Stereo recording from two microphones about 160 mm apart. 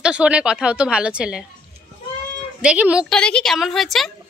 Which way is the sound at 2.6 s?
10° right (ahead or behind).